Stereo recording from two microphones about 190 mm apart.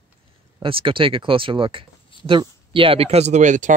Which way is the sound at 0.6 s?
30° right (ahead or behind).